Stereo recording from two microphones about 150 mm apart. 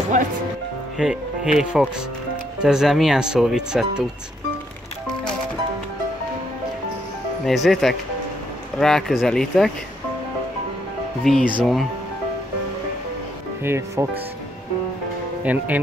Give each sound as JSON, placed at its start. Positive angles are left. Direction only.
{"t": 0.9, "sound": "speech", "side_deg": -5}
{"t": 7.4, "sound": "speech", "side_deg": 0}
{"t": 11.2, "sound": "speech", "side_deg": 0}
{"t": 13.7, "sound": "speech", "side_deg": -20}
{"t": 15.4, "sound": "speech", "side_deg": -10}